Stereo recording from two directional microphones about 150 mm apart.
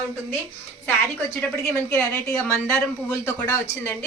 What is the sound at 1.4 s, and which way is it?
A woman's voice, 10° left (ahead or behind).